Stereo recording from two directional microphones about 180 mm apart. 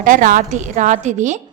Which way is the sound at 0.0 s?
50° right (ahead or behind).